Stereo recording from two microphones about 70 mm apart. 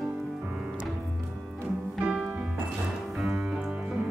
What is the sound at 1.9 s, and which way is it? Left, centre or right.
Music, centre.